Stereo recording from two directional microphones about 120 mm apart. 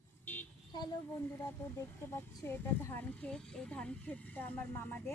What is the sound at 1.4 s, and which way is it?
A woman's voice, 20° left (ahead or behind).